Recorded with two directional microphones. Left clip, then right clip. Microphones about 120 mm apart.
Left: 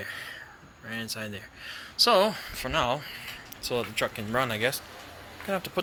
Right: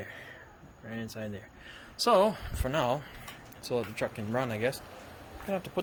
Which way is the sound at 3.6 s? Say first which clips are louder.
Left 3 dB; 10° right (ahead or behind).